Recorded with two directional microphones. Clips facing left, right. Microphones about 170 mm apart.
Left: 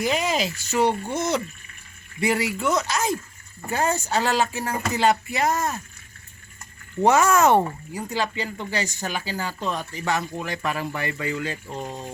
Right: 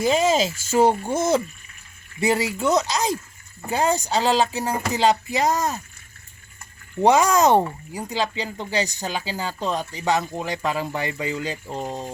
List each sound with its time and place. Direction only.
0.0 s speech: 25° right (ahead or behind)
0.8 s speech: 45° right (ahead or behind)
2.2 s speech: 25° right (ahead or behind)
7.0 s speech: 15° right (ahead or behind)
11.7 s speech: 35° right (ahead or behind)